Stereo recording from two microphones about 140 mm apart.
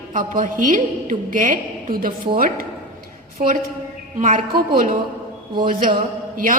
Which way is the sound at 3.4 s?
70° right (ahead or behind).